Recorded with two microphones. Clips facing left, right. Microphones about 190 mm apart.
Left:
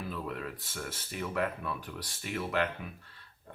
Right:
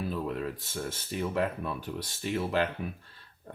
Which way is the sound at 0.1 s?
30° right (ahead or behind).